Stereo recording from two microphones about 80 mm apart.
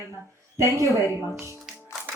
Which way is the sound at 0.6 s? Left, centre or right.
Right.